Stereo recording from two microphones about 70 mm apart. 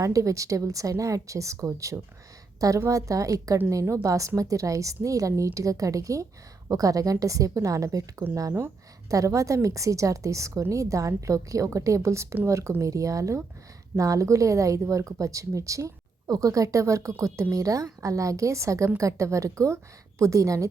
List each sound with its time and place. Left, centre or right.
0.0 s a woman's voice: right
9.0 s speech: right